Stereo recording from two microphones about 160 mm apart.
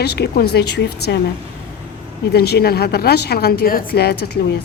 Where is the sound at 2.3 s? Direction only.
85° left.